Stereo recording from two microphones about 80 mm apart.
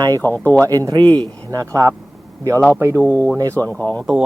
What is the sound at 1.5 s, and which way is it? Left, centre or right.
Speech, right.